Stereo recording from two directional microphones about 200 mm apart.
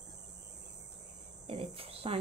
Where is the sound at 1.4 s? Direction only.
30° right (ahead or behind).